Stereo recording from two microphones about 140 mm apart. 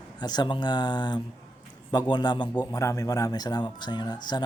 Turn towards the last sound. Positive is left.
turn(degrees=30)  # may be behind; listen again after turning